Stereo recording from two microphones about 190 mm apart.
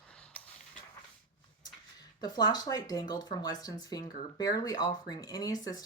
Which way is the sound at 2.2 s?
20° left (ahead or behind).